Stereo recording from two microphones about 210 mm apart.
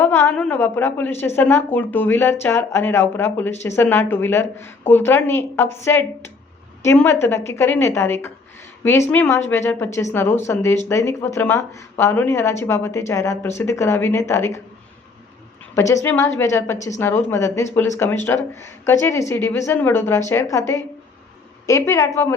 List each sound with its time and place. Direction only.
0.0 s a woman's voice: 10° left (ahead or behind)
15.7 s a woman's voice: 15° left (ahead or behind)